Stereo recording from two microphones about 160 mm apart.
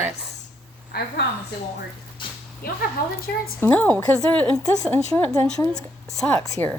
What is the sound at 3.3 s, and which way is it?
Speech, 90° left.